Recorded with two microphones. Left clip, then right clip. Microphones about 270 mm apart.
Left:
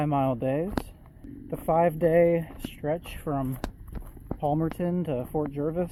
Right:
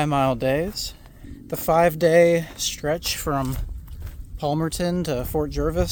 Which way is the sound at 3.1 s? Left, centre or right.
Right.